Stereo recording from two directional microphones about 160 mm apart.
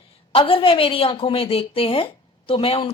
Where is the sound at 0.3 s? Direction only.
35° left (ahead or behind).